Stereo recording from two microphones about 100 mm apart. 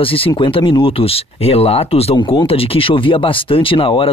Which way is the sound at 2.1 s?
45° left (ahead or behind).